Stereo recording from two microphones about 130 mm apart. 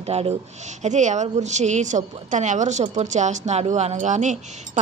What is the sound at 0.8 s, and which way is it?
A woman's voice, 65° right (ahead or behind).